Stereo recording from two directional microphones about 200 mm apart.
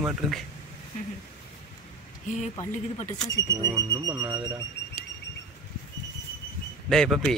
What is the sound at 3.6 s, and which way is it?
Speech, 15° right (ahead or behind).